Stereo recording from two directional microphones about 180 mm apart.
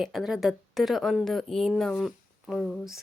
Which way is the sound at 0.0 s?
Centre (ahead or behind).